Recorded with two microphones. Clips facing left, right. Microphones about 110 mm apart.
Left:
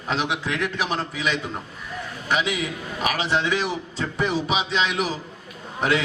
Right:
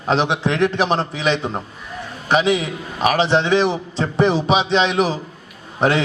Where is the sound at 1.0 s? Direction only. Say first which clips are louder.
Right 6 dB; 30° right (ahead or behind).